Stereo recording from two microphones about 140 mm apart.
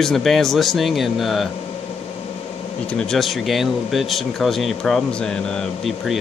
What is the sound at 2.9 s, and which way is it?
Speech, centre (ahead or behind).